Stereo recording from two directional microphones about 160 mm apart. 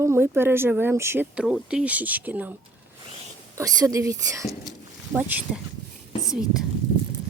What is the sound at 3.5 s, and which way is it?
Speech, 20° right (ahead or behind).